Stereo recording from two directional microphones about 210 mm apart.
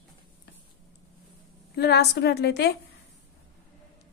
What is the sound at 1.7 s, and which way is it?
A woman's voice, 50° left (ahead or behind).